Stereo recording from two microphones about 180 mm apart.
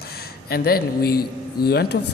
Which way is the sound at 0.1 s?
60° left (ahead or behind).